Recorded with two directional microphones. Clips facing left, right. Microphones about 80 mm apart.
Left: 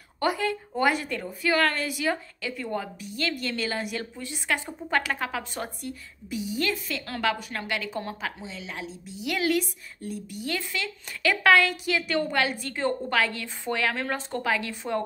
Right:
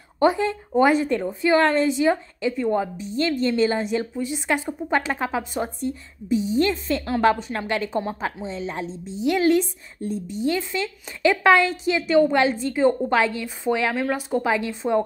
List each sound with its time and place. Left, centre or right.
0.2 s a woman's voice: right